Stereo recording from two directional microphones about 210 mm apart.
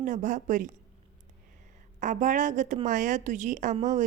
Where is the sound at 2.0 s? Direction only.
35° right (ahead or behind).